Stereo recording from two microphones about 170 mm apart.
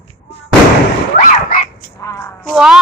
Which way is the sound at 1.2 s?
55° left (ahead or behind).